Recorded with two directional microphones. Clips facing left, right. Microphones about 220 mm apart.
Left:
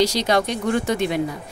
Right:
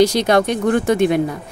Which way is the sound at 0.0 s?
55° right (ahead or behind).